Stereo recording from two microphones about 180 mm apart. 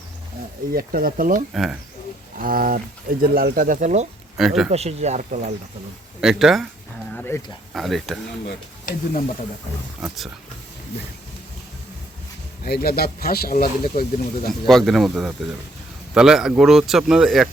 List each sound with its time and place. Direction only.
0.7 s speech: 55° right (ahead or behind)
1.5 s speech: centre (ahead or behind)
2.4 s speech: 50° right (ahead or behind)
4.4 s speech: centre (ahead or behind)
4.7 s speech: 35° right (ahead or behind)
6.1 s speech: centre (ahead or behind)
7.1 s speech: 10° left (ahead or behind)
7.7 s speech: centre (ahead or behind)
12.6 s speech: 60° left (ahead or behind)
14.7 s speech: centre (ahead or behind)